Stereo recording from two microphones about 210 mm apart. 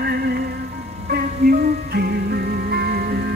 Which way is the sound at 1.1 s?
45° right (ahead or behind).